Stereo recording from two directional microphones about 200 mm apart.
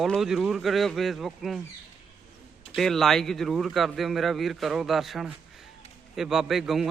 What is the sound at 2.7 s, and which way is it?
A man's voice, centre (ahead or behind).